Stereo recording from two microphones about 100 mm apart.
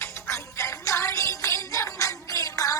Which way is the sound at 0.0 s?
25° left (ahead or behind).